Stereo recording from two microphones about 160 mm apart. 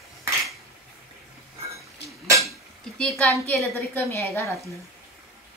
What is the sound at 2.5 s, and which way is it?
Cutlery, centre (ahead or behind).